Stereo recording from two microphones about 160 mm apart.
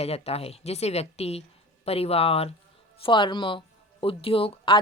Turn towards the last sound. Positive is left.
turn(degrees=35)  # may be behind; listen again after turning